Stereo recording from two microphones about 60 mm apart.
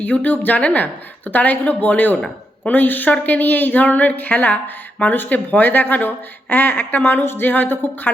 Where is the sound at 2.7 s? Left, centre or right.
Left.